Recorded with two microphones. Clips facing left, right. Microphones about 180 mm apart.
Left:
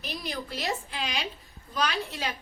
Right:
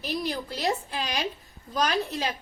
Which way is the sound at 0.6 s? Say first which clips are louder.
Right 6 dB; 40° right (ahead or behind).